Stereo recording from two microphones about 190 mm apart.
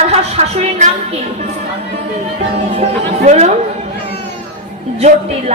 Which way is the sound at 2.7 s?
35° right (ahead or behind).